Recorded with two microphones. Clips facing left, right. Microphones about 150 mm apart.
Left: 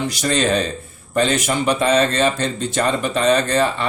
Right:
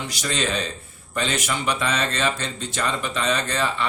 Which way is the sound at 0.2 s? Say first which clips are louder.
Left 7 dB; 45° left (ahead or behind).